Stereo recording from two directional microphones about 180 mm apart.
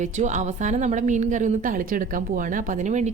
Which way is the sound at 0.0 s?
40° right (ahead or behind).